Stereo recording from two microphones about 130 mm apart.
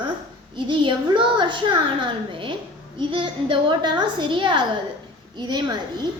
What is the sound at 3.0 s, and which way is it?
A woman's voice, 40° right (ahead or behind).